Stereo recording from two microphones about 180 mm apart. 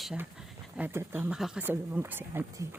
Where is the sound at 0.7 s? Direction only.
10° right (ahead or behind).